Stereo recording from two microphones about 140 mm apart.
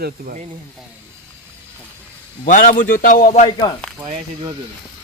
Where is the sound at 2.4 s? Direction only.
70° left (ahead or behind).